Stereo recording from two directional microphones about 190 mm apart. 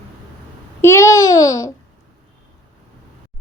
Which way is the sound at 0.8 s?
15° left (ahead or behind).